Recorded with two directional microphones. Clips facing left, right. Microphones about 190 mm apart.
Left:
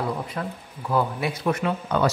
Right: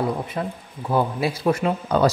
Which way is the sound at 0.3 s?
25° right (ahead or behind).